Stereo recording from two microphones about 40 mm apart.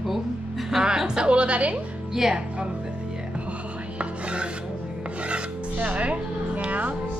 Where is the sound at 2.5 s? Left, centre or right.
Centre.